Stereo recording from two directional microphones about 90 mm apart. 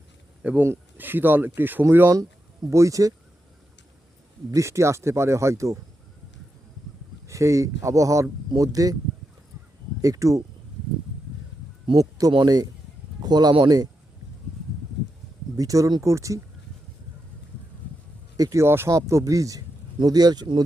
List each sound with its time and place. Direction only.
0.6 s speech: 25° right (ahead or behind)
4.5 s speech: 35° right (ahead or behind)
7.3 s speech: 35° right (ahead or behind)
10.0 s speech: 40° right (ahead or behind)
11.9 s speech: 40° right (ahead or behind)
15.5 s speech: 40° right (ahead or behind)
18.3 s speech: 40° right (ahead or behind)
18.6 s speech: 25° right (ahead or behind); by 20.7 s 50° right (ahead or behind)